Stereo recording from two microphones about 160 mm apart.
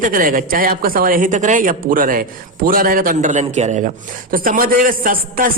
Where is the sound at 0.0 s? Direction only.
60° right (ahead or behind).